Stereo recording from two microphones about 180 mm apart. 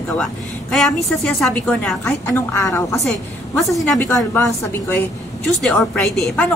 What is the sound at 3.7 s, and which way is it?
Speech, centre (ahead or behind).